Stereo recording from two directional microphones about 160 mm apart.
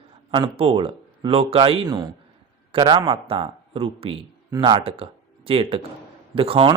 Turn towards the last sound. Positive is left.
turn(degrees=-35)  # may be behind; listen again after turning